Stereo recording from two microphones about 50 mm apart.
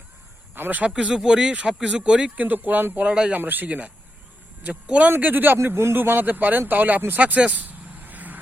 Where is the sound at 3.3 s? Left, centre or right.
Right.